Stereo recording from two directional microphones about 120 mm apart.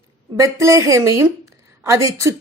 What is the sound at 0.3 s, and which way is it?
A woman's voice, 25° right (ahead or behind).